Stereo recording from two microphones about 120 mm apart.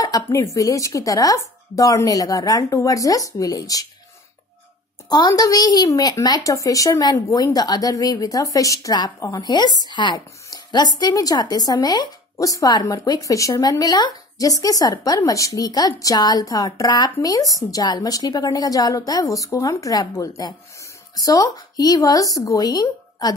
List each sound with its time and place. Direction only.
0.0 s a woman's voice: 30° left (ahead or behind)
5.1 s a woman's voice: 35° left (ahead or behind)